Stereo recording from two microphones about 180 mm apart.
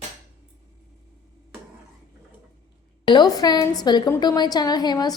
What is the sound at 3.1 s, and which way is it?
A woman's voice, 25° left (ahead or behind).